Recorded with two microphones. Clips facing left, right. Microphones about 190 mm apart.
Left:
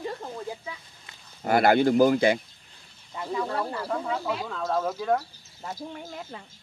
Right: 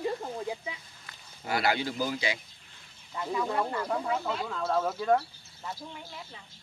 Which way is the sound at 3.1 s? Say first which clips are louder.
Left 1 dB; 10° left (ahead or behind).